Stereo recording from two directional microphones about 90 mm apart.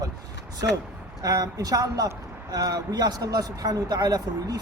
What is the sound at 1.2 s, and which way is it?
Speech, 40° right (ahead or behind).